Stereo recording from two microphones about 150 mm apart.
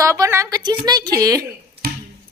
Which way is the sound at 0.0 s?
20° right (ahead or behind).